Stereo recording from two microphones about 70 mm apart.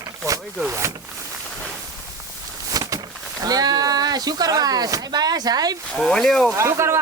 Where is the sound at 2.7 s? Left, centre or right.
Right.